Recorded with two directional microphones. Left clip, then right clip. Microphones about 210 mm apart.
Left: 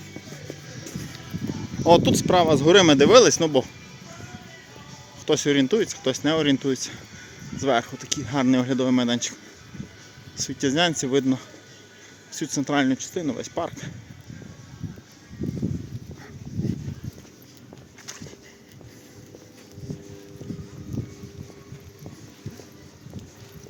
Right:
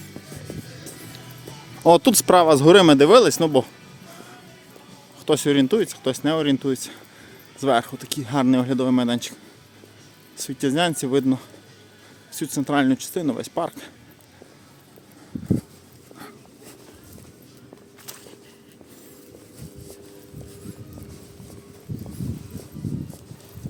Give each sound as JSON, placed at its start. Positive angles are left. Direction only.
{"t": 1.8, "sound": "speech", "side_deg": -25}
{"t": 2.7, "sound": "speech", "side_deg": -20}
{"t": 5.2, "sound": "speech", "side_deg": -15}